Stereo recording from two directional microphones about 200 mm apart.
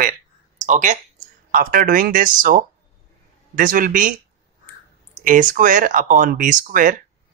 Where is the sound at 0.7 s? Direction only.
40° right (ahead or behind).